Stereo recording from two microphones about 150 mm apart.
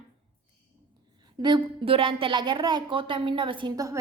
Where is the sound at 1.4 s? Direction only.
30° right (ahead or behind).